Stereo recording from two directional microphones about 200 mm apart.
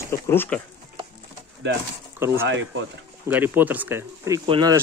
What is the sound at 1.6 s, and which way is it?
Speech, 60° right (ahead or behind).